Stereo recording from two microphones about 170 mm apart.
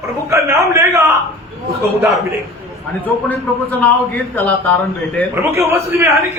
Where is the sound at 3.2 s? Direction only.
10° left (ahead or behind).